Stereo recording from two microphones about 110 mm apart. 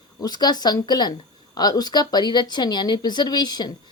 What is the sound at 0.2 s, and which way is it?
Speech, 40° left (ahead or behind).